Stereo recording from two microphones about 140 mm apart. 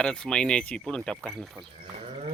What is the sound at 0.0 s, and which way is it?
Speech, 5° left (ahead or behind).